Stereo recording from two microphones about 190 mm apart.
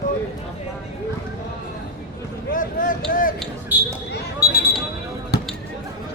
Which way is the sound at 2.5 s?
45° left (ahead or behind).